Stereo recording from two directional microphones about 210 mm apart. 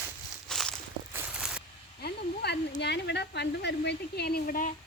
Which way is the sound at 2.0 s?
50° left (ahead or behind).